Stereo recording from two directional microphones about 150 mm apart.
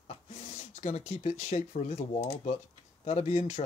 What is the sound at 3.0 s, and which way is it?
Speech, 50° left (ahead or behind).